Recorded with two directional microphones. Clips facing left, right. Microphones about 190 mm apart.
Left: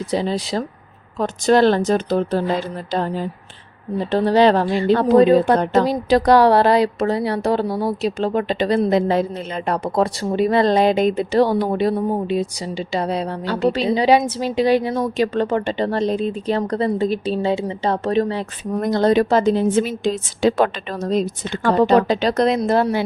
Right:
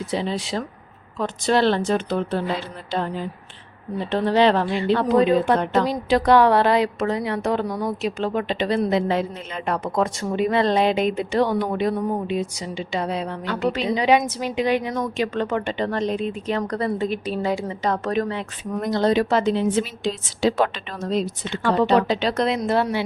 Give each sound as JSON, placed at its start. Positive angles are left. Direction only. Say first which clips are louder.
{"t": 0.1, "sound": "speech", "louder": "left 4 dB", "side_deg": 40}
{"t": 18.8, "sound": "a woman's voice", "louder": "left 4 dB", "side_deg": 45}